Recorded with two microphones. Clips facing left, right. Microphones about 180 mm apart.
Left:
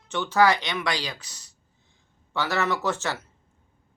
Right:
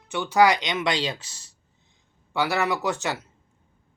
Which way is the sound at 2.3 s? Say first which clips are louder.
Right 2 dB; 15° right (ahead or behind).